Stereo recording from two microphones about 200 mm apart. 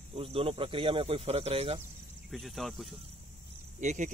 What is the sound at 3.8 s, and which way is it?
Speech, 35° right (ahead or behind).